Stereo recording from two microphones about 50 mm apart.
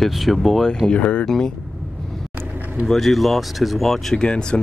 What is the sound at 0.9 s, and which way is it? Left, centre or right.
Speech, left.